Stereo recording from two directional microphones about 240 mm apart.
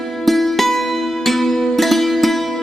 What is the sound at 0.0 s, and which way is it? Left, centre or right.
Music, centre.